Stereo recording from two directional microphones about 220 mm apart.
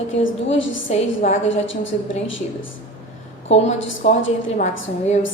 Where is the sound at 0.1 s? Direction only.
60° left (ahead or behind).